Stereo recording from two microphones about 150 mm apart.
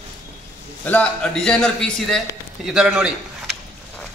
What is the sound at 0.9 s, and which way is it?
A man's voice, 5° left (ahead or behind).